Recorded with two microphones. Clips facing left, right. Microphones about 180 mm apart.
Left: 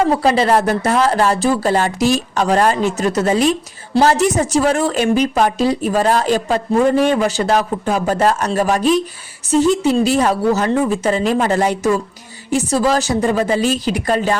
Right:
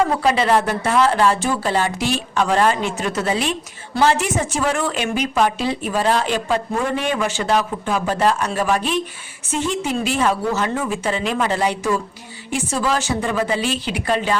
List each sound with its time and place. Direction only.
0.2 s a woman's voice: 35° left (ahead or behind)